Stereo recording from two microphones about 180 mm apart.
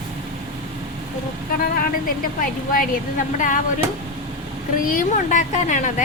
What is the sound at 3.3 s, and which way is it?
Speech, 45° left (ahead or behind).